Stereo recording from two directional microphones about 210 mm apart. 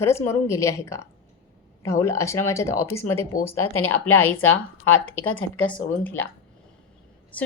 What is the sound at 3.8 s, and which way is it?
Speech, 90° left.